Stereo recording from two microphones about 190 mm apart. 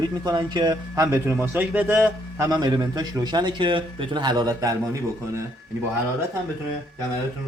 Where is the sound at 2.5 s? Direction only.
20° right (ahead or behind).